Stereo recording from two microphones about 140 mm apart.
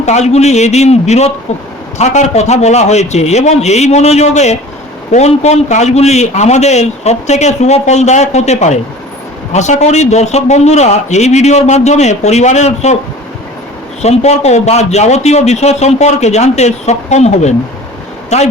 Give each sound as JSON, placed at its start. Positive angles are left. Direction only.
{"t": 0.0, "sound": "a man's voice", "side_deg": 55}
{"t": 14.0, "sound": "a man's voice", "side_deg": 50}